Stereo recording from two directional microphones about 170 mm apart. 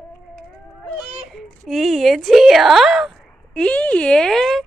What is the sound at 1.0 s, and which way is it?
A child's voice, 5° right (ahead or behind).